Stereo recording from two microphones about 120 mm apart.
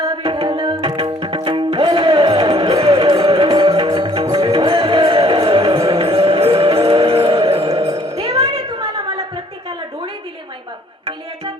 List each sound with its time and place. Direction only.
0.2 s music: 55° right (ahead or behind); by 0.9 s 35° right (ahead or behind)
0.9 s music: 50° right (ahead or behind)
4.4 s music: 35° right (ahead or behind)
4.6 s music: 50° right (ahead or behind)
8.2 s a sound: 60° right (ahead or behind)